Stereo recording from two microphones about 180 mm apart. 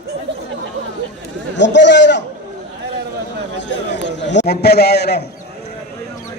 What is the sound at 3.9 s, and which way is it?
A man's voice, 80° left.